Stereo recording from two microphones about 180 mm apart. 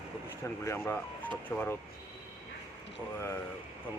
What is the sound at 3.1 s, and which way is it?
Speech, 15° left (ahead or behind).